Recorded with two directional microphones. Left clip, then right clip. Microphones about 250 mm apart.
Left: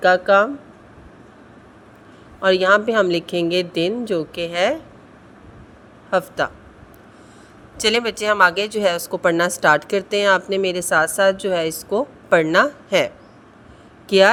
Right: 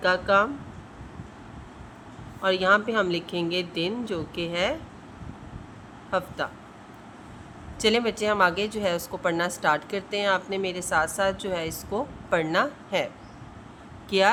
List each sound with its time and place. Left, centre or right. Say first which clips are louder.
0.0 s speech: left 7 dB; left
2.4 s speech: left 7 dB; left
6.1 s speech: left 8 dB; left
7.8 s speech: left 5 dB; left
14.1 s speech: left 9 dB; left